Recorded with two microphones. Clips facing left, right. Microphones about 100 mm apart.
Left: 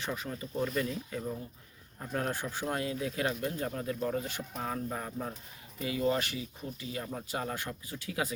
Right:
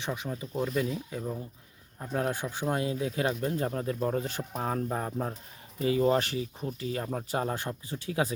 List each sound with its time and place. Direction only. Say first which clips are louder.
0.0 s speech: right 3 dB; 15° right (ahead or behind)